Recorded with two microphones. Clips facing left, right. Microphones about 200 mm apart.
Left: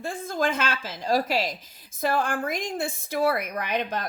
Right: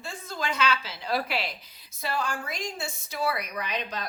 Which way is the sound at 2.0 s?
55° left (ahead or behind).